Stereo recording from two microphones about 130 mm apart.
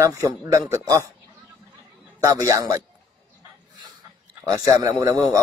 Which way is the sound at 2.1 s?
25° right (ahead or behind).